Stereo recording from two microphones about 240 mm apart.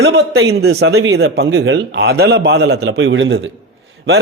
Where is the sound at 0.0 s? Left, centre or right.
Right.